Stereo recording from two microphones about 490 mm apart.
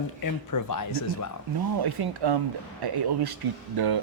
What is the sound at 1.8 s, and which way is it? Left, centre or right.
Speech, right.